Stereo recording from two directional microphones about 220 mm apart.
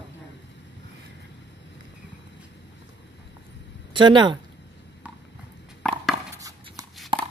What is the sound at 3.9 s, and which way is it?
Speech, 20° right (ahead or behind).